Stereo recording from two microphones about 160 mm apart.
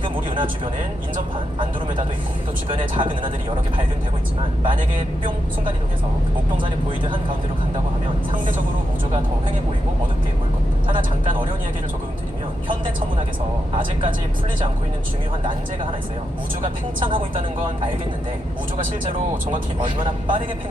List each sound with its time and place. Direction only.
0.0 s speech: 30° right (ahead or behind)
2.6 s speech: 35° right (ahead or behind)
16.6 s speech: 30° right (ahead or behind)
18.8 s speech: 55° right (ahead or behind)
19.8 s speech: 30° right (ahead or behind)